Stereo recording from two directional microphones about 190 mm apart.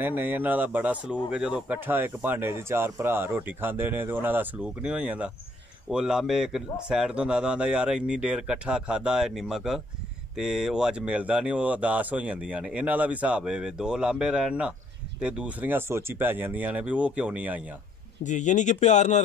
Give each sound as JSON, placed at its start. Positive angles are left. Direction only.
{"t": 0.0, "sound": "a man's voice", "side_deg": -10}
{"t": 18.2, "sound": "speech", "side_deg": 40}